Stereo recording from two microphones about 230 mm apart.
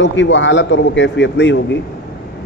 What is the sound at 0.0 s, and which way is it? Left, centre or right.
Speech, left.